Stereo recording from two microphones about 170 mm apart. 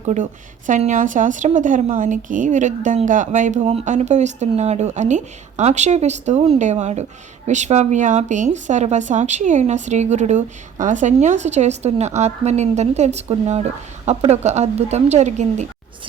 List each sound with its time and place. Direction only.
0.0 s a woman's voice: 45° right (ahead or behind)